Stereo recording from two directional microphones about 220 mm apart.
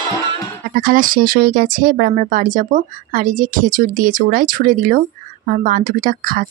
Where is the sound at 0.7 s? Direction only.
40° right (ahead or behind).